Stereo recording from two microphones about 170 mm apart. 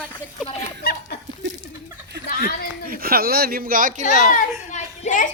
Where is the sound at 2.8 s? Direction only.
65° right (ahead or behind); by 4.3 s 45° right (ahead or behind).